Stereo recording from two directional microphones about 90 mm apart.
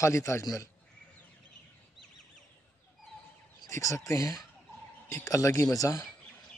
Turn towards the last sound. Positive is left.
turn(degrees=40)  # may be behind; listen again after turning